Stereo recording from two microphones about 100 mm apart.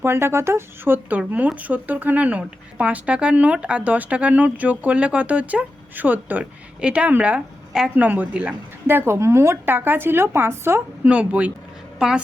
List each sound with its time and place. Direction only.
0.0 s speech: 25° right (ahead or behind)
11.1 s a woman's voice: 10° right (ahead or behind)